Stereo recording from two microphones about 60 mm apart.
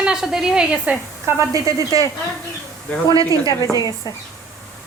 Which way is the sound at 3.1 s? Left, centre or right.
Right.